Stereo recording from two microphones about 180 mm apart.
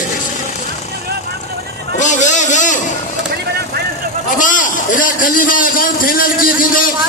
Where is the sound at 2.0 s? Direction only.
40° left (ahead or behind).